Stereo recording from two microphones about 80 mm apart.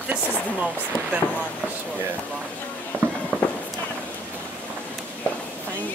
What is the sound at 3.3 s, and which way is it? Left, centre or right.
Run, right.